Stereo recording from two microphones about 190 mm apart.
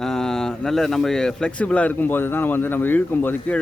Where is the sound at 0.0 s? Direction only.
5° left (ahead or behind).